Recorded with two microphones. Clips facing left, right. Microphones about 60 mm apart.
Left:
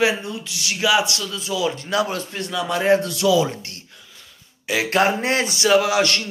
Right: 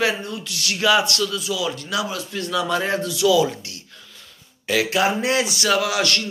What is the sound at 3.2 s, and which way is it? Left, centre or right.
Speech, left.